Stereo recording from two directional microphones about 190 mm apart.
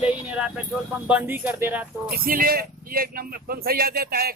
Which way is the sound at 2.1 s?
50° right (ahead or behind).